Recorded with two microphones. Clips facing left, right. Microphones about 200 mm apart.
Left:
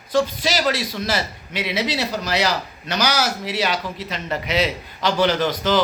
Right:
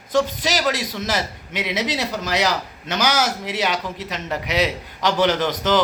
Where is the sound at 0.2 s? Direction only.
15° right (ahead or behind).